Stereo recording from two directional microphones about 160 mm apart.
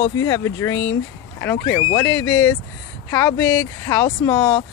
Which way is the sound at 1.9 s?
20° left (ahead or behind).